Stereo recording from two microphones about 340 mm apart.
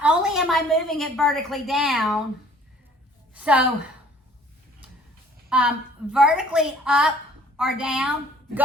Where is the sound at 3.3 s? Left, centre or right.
Centre.